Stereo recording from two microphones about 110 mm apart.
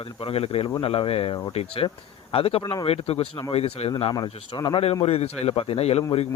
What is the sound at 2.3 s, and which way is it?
A man's voice, 60° left (ahead or behind).